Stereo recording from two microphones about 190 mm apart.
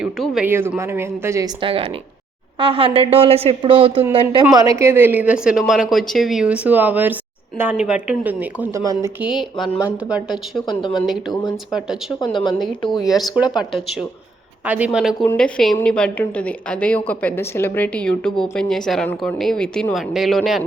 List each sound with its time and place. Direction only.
0.0 s speech: 5° right (ahead or behind)
1.6 s a woman's voice: 30° right (ahead or behind)
4.5 s speech: 15° right (ahead or behind)
9.2 s a woman's voice: centre (ahead or behind)
10.7 s speech: 25° left (ahead or behind)
12.2 s speech: 25° left (ahead or behind)
13.0 s a woman's voice: centre (ahead or behind)
14.7 s a woman's voice: 5° right (ahead or behind)